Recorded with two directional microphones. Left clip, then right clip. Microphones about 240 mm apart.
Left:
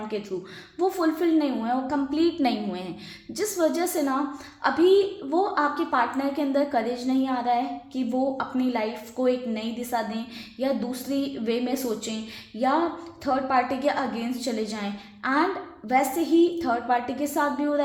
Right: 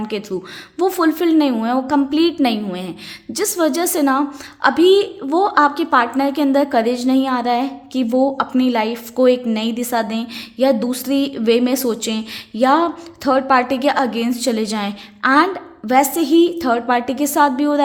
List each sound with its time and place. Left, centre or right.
0.1 s a woman's voice: right